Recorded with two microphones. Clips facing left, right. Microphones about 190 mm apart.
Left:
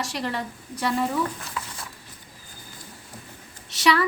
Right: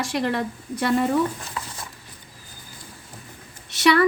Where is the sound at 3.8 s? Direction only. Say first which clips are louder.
Right 4 dB; 55° right (ahead or behind).